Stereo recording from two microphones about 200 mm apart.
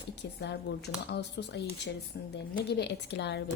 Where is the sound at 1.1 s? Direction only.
55° left (ahead or behind).